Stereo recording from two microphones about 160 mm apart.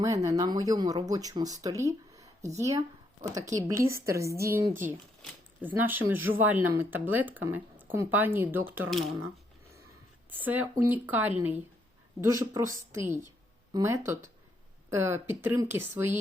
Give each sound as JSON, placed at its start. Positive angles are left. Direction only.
{"t": 0.0, "sound": "speech", "side_deg": -20}
{"t": 8.9, "sound": "speech", "side_deg": 0}
{"t": 10.3, "sound": "speech", "side_deg": -10}